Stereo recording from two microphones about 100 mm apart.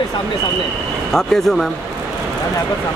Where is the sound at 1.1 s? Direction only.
5° left (ahead or behind).